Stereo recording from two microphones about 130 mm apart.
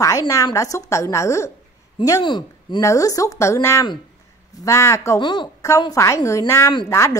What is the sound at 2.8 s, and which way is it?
Speech, 25° left (ahead or behind).